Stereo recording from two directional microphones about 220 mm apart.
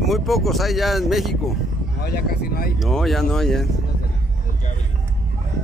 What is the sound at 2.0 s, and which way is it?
Speech, 45° left (ahead or behind).